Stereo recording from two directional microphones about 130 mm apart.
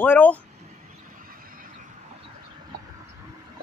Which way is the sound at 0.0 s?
15° left (ahead or behind).